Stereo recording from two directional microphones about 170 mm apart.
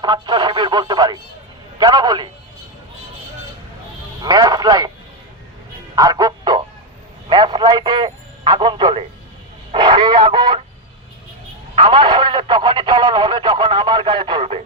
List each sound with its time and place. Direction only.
0.0 s speech: 25° right (ahead or behind)
4.2 s speech: 25° right (ahead or behind)
6.0 s music: 20° right (ahead or behind)
7.3 s a man's voice: 25° right (ahead or behind)
9.7 s a sound: 30° right (ahead or behind)
11.7 s speech: 30° right (ahead or behind)